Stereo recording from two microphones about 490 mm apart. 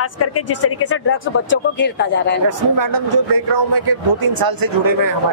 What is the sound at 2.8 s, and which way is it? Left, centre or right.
A man's voice, right.